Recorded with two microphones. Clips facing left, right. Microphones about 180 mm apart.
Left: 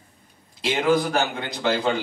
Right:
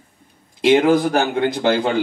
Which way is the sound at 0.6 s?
55° right (ahead or behind).